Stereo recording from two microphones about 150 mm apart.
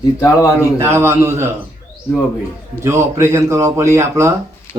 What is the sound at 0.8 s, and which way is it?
Speech, 15° right (ahead or behind).